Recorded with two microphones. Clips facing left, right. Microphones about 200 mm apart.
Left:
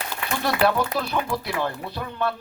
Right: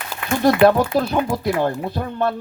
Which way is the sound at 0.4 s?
45° right (ahead or behind).